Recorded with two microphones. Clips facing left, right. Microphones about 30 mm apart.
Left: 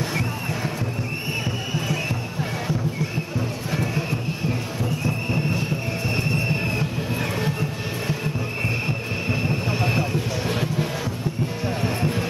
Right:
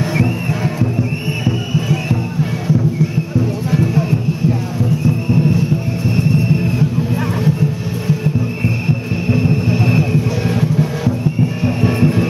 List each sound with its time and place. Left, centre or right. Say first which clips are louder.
1.7 s music: right 7 dB; centre
3.3 s music: right 11 dB; centre
6.0 s music: right 8 dB; left
8.2 s music: right 7 dB; centre
11.6 s music: right 9 dB; centre